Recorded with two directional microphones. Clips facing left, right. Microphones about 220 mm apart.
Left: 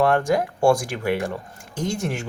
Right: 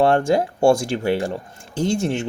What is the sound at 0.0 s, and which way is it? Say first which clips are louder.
Speech: right 3 dB; 25° right (ahead or behind).